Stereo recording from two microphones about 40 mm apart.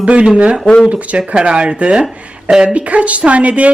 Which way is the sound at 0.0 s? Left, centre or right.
Right.